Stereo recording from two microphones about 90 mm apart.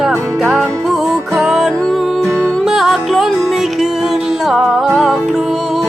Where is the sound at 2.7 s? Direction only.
Centre (ahead or behind).